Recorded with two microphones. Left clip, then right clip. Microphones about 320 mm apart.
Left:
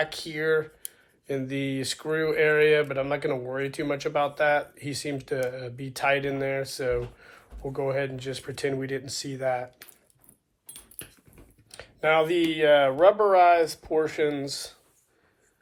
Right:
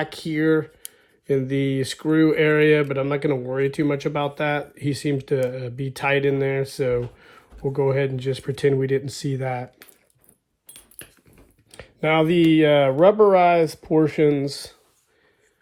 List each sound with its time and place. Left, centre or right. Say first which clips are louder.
0.0 s speech: right 4 dB; right
10.7 s dog: right 1 dB; centre
11.7 s speech: right 2 dB; right